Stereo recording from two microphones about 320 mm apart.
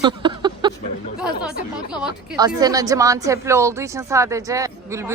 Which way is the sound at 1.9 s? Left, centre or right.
Centre.